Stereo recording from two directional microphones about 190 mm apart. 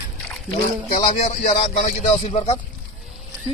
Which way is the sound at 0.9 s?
35° left (ahead or behind).